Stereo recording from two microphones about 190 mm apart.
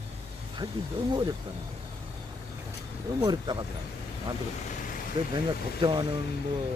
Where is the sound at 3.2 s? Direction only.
20° right (ahead or behind).